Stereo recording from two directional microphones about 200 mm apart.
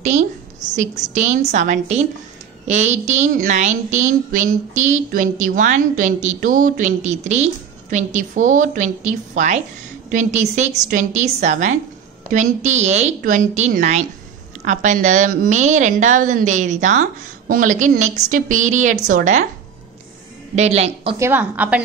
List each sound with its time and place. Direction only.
0.7 s a woman's voice: 35° right (ahead or behind)
20.5 s a woman's voice: 35° right (ahead or behind)
21.2 s a woman's voice: 10° right (ahead or behind)